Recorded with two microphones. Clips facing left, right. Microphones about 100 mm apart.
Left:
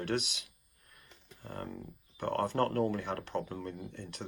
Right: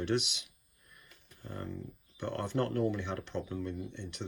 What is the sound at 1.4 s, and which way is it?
Speech, 45° left (ahead or behind).